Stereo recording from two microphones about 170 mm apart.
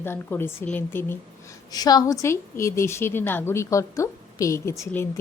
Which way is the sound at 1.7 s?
20° left (ahead or behind).